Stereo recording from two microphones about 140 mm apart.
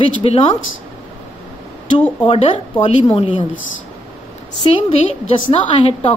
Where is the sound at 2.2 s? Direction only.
40° left (ahead or behind).